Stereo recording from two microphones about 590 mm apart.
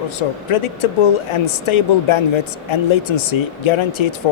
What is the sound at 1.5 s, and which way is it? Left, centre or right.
Speech, left.